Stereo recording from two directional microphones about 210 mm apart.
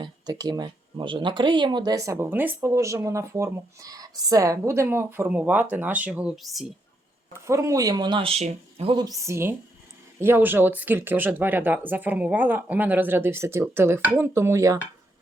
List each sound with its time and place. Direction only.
0.0 s speech: 20° right (ahead or behind); by 6.7 s centre (ahead or behind)
7.4 s speech: 15° right (ahead or behind)